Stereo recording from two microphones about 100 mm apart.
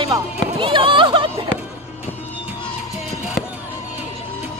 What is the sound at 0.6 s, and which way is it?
Speech, 60° right (ahead or behind).